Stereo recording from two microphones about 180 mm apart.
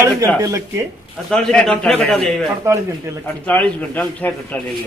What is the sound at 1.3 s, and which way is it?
Speech, 5° left (ahead or behind).